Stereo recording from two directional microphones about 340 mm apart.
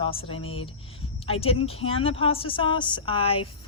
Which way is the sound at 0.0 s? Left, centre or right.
Centre.